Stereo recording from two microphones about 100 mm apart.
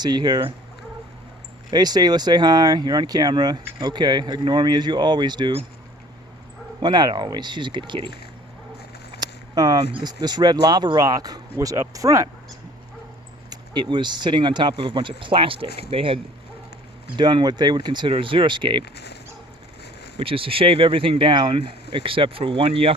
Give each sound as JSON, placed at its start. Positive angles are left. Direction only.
{"t": 0.0, "sound": "speech", "side_deg": -45}
{"t": 1.7, "sound": "speech", "side_deg": -45}
{"t": 6.7, "sound": "speech", "side_deg": -45}
{"t": 9.2, "sound": "a sound", "side_deg": -40}
{"t": 9.9, "sound": "speech", "side_deg": -45}
{"t": 13.5, "sound": "speech", "side_deg": -50}
{"t": 17.2, "sound": "speech", "side_deg": -45}
{"t": 20.1, "sound": "speech", "side_deg": -65}